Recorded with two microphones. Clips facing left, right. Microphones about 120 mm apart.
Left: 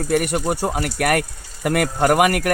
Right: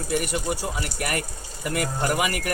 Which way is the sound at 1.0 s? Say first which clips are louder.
Left 10 dB; 65° left (ahead or behind).